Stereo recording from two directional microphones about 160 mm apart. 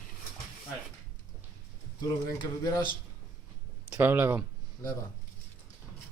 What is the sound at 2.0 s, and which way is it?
Speech, 25° left (ahead or behind).